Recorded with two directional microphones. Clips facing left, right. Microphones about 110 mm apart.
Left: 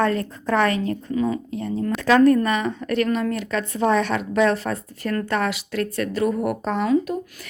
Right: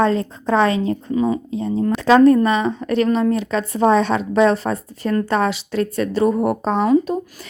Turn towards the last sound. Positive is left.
turn(degrees=-30)  # may be behind; listen again after turning